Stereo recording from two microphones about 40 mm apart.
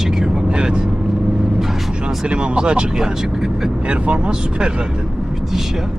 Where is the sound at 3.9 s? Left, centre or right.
Right.